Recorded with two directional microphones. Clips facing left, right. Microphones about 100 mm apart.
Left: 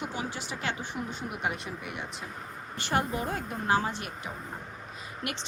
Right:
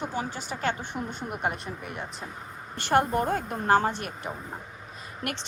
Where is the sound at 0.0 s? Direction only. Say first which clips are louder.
Right 3 dB; 45° right (ahead or behind).